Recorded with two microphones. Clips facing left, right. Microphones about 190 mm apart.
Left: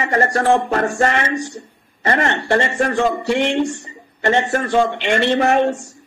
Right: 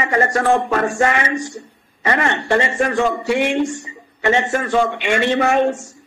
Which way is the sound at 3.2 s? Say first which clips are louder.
Even; 10° right (ahead or behind).